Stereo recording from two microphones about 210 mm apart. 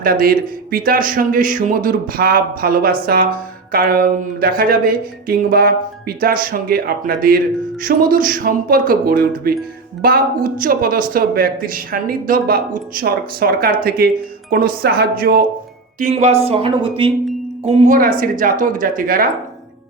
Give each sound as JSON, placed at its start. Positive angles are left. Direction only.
{"t": 0.0, "sound": "speech", "side_deg": -45}